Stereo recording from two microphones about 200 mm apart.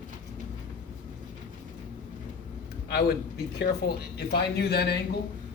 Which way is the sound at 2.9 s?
50° left (ahead or behind).